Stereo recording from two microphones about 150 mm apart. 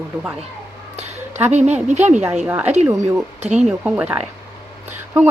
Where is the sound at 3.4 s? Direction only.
50° right (ahead or behind).